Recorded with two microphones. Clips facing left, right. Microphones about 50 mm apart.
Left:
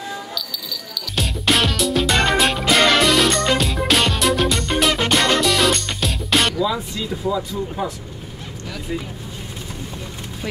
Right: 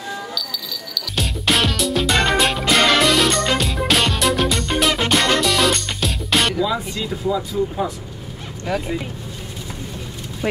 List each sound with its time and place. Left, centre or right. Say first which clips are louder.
0.3 s music: right 1 dB; centre
8.6 s speech: right 9 dB; right